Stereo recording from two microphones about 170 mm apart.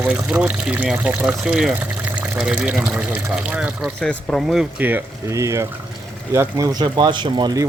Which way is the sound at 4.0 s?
5° left (ahead or behind).